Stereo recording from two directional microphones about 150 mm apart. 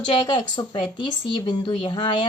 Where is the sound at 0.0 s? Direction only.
30° left (ahead or behind).